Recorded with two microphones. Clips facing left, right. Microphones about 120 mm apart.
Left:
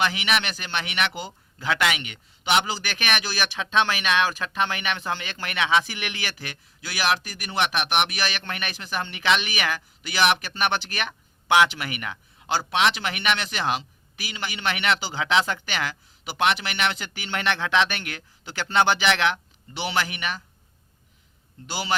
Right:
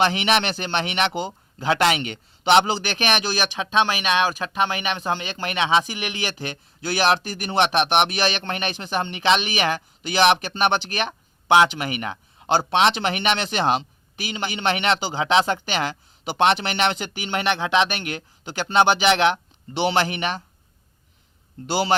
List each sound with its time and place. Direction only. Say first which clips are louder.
0.0 s a man's voice: right 5 dB; 30° right (ahead or behind)
21.7 s a man's voice: right 8 dB; 30° right (ahead or behind)